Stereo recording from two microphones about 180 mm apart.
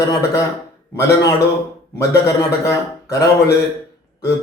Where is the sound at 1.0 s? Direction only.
15° left (ahead or behind).